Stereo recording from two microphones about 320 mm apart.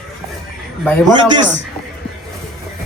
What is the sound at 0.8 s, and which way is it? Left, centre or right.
Speech, centre.